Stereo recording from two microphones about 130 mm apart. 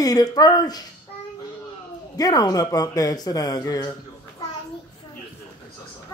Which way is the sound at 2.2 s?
30° left (ahead or behind).